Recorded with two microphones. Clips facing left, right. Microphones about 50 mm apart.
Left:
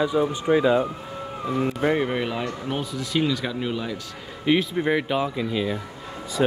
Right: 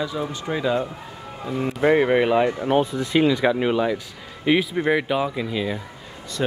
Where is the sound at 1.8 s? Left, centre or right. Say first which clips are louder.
Right 9 dB; centre.